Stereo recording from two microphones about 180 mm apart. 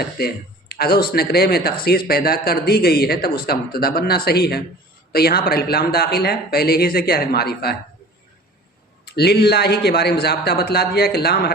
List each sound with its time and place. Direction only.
0.0 s speech: 60° left (ahead or behind)
9.0 s speech: 65° left (ahead or behind)